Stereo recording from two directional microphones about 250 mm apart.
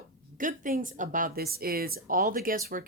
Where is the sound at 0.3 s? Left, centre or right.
Right.